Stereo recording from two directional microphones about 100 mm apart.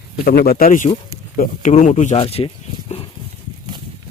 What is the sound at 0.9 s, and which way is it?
Speech, 80° left.